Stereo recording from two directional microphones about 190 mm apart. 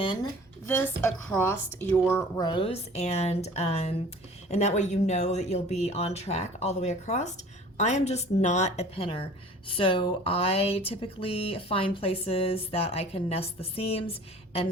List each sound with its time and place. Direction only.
0.0 s speech: 25° left (ahead or behind)
0.7 s speech: 10° left (ahead or behind); by 14.0 s 30° left (ahead or behind)